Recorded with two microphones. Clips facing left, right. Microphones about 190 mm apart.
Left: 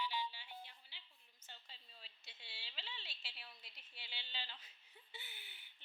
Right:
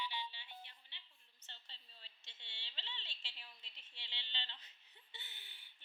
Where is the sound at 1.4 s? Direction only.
10° left (ahead or behind).